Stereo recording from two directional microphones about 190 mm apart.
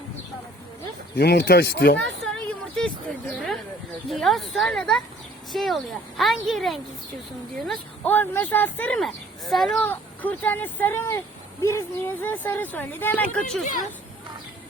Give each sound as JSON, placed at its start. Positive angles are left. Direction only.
{"t": 1.1, "sound": "speech", "side_deg": 60}
{"t": 2.2, "sound": "a sound", "side_deg": 5}
{"t": 4.1, "sound": "speech", "side_deg": 0}